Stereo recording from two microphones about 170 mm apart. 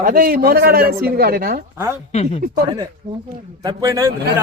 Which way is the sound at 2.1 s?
40° left (ahead or behind).